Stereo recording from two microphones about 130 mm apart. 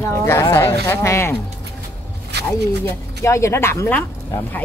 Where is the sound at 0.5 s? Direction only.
20° left (ahead or behind).